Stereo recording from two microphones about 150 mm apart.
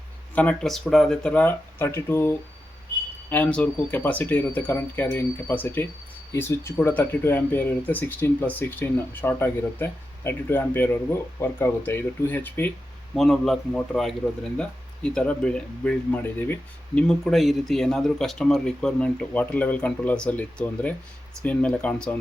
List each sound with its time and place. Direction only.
0.3 s speech: 5° left (ahead or behind)
13.1 s speech: centre (ahead or behind)